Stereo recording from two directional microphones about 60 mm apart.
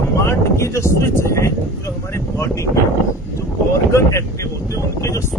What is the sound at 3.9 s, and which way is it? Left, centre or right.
Speech, left.